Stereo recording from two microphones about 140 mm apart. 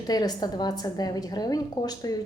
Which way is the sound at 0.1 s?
30° left (ahead or behind).